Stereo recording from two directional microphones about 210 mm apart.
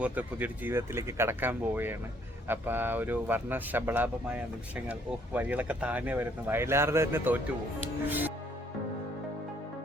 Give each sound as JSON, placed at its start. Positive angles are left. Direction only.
{"t": 0.0, "sound": "speech", "side_deg": -5}